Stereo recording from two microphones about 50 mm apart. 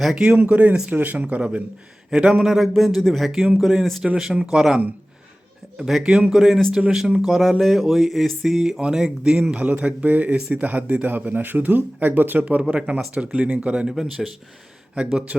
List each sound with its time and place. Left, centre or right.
0.0 s speech: centre
0.3 s speech: right
0.9 s speech: right; by 2.4 s centre
2.4 s a man's voice: centre
6.0 s speech: centre
9.6 s speech: right
12.5 s speech: right
13.9 s speech: centre